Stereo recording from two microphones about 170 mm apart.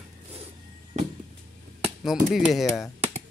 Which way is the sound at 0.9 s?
45° right (ahead or behind).